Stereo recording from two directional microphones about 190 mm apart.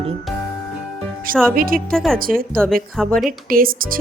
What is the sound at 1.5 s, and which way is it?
Speech, 50° right (ahead or behind).